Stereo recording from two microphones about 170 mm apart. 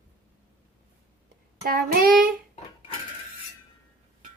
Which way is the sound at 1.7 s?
60° right (ahead or behind).